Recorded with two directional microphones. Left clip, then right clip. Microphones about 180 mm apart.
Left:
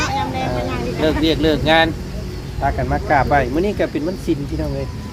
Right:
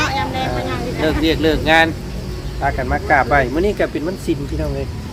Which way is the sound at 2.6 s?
25° left (ahead or behind).